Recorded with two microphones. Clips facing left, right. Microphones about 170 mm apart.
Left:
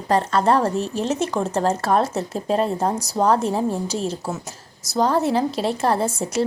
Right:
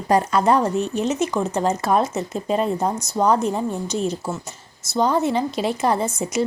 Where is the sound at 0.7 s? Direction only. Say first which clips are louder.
Right 1 dB; 35° left (ahead or behind).